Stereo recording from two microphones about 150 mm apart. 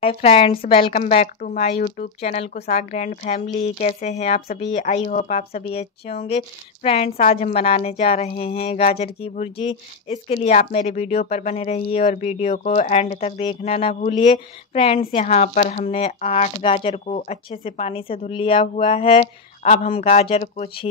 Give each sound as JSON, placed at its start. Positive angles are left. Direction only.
{"t": 0.0, "sound": "speech", "side_deg": 40}
{"t": 0.9, "sound": "a woman's voice", "side_deg": 50}
{"t": 7.2, "sound": "a woman's voice", "side_deg": 60}